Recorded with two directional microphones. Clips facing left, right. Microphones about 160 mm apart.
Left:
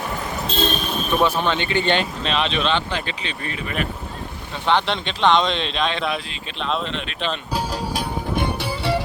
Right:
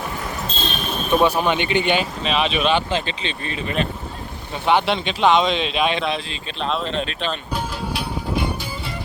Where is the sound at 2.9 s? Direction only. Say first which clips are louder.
Right 3 dB; 25° right (ahead or behind).